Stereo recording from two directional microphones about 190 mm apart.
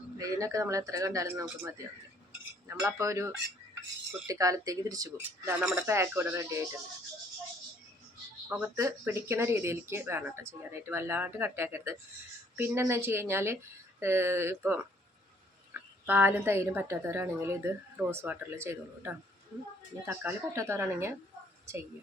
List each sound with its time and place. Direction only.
0.2 s a woman's voice: 15° right (ahead or behind)
2.6 s a woman's voice: 15° right (ahead or behind)
8.4 s a woman's voice: 5° right (ahead or behind)